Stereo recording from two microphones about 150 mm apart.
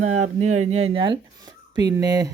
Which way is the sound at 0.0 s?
50° right (ahead or behind).